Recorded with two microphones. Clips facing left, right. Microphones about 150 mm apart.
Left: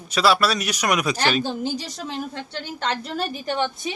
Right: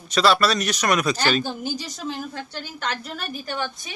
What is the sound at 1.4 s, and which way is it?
A woman's voice, 25° left (ahead or behind).